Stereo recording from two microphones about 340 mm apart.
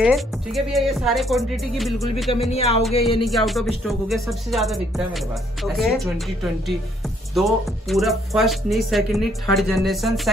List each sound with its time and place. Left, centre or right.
0.0 s music: centre
2.5 s speech: centre
3.3 s music: centre